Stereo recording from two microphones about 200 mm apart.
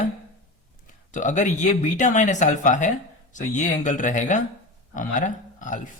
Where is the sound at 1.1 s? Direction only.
40° left (ahead or behind).